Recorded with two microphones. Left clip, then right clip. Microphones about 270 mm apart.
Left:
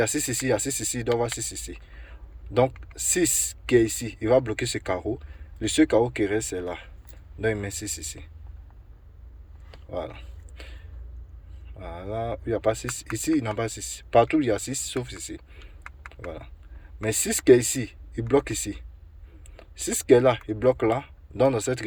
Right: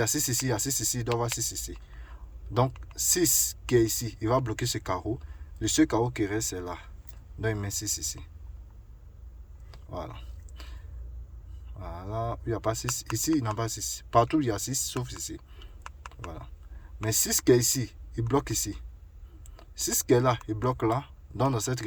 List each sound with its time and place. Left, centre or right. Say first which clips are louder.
0.0 s speech: left 3 dB; right
9.9 s a sound: left 6 dB; right
11.8 s speech: left 3 dB; right